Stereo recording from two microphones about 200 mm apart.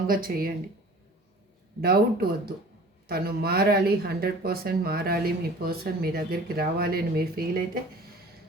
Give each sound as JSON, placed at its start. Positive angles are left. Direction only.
{"t": 0.1, "sound": "speech", "side_deg": -45}
{"t": 1.8, "sound": "speech", "side_deg": -50}